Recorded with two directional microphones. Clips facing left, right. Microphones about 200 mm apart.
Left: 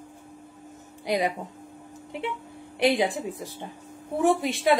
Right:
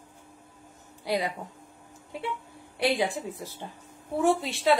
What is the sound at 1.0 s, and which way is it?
Speech, 15° left (ahead or behind).